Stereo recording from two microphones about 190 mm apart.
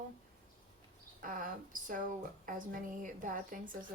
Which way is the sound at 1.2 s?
45° right (ahead or behind).